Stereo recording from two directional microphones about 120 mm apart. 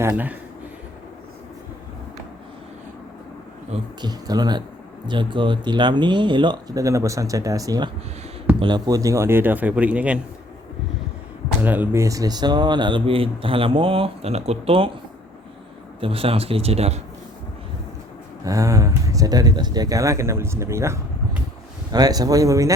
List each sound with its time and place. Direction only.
0.0 s speech: 15° right (ahead or behind)
4.0 s speech: 35° right (ahead or behind); by 10.2 s 10° right (ahead or behind)
11.6 s speech: 15° right (ahead or behind); by 14.8 s 55° right (ahead or behind)
16.0 s speech: 50° right (ahead or behind)
18.4 s speech: 25° right (ahead or behind)